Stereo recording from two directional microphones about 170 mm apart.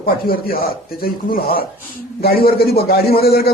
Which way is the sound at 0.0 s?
60° left (ahead or behind).